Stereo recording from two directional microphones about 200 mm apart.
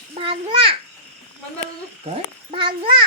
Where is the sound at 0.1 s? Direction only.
25° right (ahead or behind).